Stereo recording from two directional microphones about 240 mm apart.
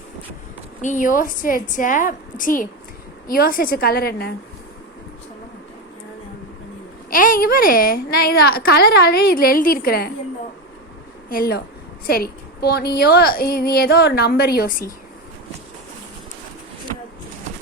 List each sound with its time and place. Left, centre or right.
0.8 s a woman's voice: left
7.1 s a woman's voice: left
11.3 s a woman's voice: left